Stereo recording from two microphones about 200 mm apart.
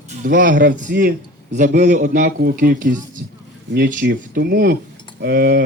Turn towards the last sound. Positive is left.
turn(degrees=-50)  # may be behind; listen again after turning